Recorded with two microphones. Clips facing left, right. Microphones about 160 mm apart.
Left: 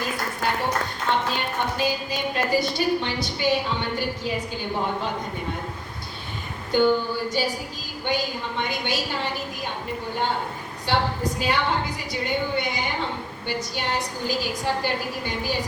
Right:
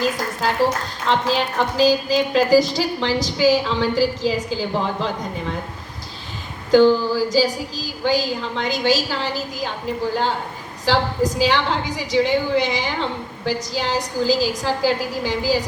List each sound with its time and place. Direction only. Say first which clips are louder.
1.0 s a woman's voice: right 7 dB; 90° right
6.7 s a woman's voice: right 7 dB; 90° right
10.8 s a woman's voice: right 5 dB; 90° right